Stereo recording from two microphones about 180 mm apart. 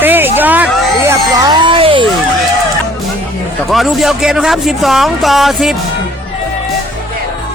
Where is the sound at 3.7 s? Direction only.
Centre (ahead or behind).